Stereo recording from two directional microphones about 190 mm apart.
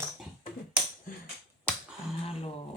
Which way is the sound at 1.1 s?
45° left (ahead or behind).